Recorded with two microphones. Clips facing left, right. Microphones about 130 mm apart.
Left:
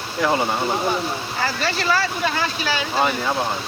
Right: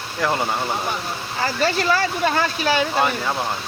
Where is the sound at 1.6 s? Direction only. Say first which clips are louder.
Right 3 dB; 45° right (ahead or behind).